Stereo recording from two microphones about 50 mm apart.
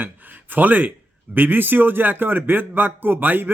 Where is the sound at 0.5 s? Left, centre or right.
Right.